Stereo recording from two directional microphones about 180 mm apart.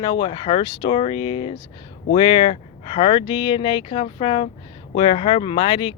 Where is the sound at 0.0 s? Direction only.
25° left (ahead or behind).